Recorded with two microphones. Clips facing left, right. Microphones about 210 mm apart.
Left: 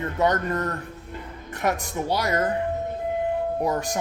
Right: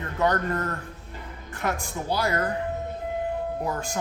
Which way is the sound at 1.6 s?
20° left (ahead or behind).